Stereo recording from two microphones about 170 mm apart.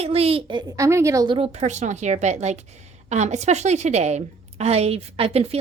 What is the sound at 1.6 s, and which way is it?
A woman's voice, 45° right (ahead or behind).